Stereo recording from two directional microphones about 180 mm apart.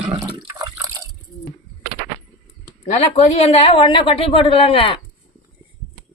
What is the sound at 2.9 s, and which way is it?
Speech, 40° left (ahead or behind).